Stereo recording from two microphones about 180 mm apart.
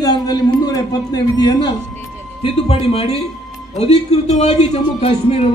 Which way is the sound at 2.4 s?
35° left (ahead or behind).